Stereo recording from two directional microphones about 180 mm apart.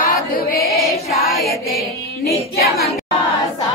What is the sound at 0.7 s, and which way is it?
Music, centre (ahead or behind).